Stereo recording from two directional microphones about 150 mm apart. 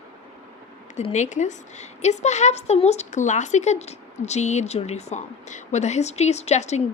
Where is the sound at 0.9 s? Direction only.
50° left (ahead or behind).